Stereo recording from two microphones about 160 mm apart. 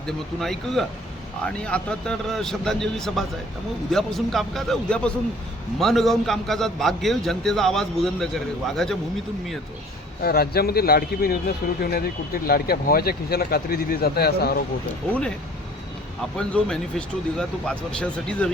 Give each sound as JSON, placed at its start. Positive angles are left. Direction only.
{"t": 0.3, "sound": "a man's voice", "side_deg": 0}
{"t": 10.2, "sound": "speech", "side_deg": 75}
{"t": 16.5, "sound": "a man's voice", "side_deg": 5}